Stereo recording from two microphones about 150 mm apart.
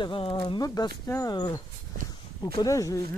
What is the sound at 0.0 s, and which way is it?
Speech, 35° left (ahead or behind).